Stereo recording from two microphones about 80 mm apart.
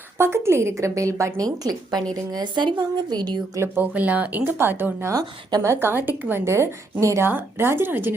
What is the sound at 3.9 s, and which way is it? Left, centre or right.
A woman's voice, centre.